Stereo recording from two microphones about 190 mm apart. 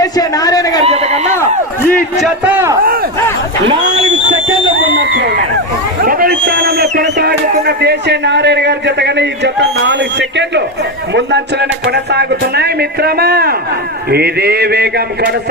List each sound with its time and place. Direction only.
0.0 s a man's voice: 20° left (ahead or behind)
0.9 s speech: 35° right (ahead or behind)
1.4 s speech: 10° left (ahead or behind)
2.1 s a man's voice: 5° right (ahead or behind)
5.1 s a man's voice: 60° right (ahead or behind)
6.1 s a sound: 50° right (ahead or behind)
6.9 s music: 60° right (ahead or behind)
7.8 s a man's voice: 60° right (ahead or behind)